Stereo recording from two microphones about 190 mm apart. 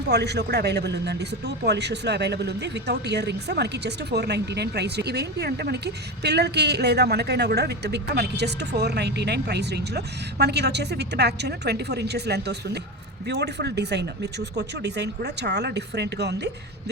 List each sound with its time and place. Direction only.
0.1 s a man's voice: 60° right (ahead or behind)